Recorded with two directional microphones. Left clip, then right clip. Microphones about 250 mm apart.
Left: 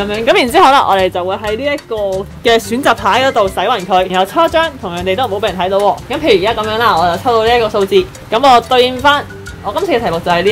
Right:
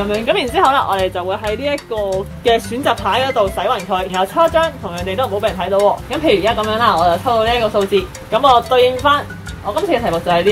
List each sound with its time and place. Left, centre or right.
0.0 s speech: left
2.4 s speech: left